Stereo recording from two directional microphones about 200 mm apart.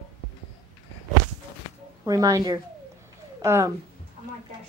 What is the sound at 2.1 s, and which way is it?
Speech, 15° right (ahead or behind).